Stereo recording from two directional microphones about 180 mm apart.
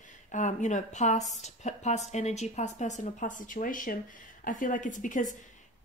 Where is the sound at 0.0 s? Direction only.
45° left (ahead or behind).